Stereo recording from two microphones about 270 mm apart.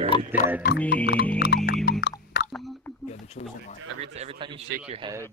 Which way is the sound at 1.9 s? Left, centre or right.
Left.